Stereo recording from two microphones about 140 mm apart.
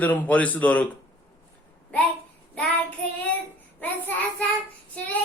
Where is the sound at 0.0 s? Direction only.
10° left (ahead or behind).